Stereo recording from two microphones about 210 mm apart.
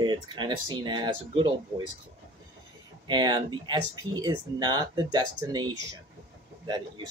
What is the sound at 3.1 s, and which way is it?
Speech, 20° right (ahead or behind).